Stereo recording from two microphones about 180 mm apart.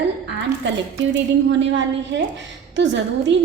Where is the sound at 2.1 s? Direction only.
80° right.